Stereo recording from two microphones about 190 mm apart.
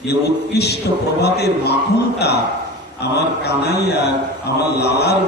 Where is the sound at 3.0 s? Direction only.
60° left (ahead or behind).